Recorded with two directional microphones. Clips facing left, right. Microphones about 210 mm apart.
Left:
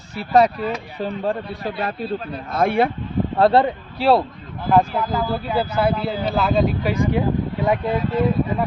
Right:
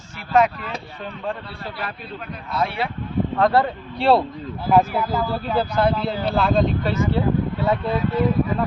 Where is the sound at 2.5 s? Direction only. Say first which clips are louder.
Left 6 dB; 50° left (ahead or behind).